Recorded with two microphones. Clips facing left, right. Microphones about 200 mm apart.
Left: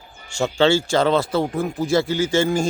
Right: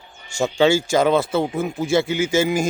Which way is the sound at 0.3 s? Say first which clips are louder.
Right 1 dB; 10° right (ahead or behind).